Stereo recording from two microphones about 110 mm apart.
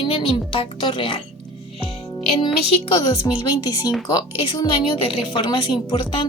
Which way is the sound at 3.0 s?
35° left (ahead or behind).